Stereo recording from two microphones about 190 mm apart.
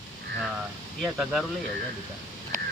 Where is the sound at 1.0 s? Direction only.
5° right (ahead or behind).